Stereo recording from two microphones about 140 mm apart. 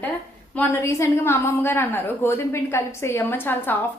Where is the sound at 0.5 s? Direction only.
15° left (ahead or behind).